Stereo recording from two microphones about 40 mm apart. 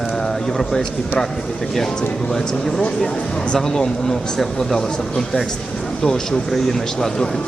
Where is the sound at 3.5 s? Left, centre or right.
Centre.